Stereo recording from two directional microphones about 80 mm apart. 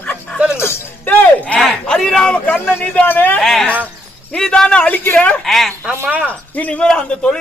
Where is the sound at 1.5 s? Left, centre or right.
Centre.